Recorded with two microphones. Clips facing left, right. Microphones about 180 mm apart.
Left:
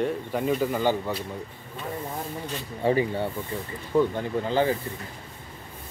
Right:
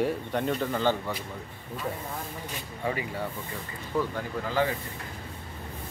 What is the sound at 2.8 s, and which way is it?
Speech, 30° left (ahead or behind).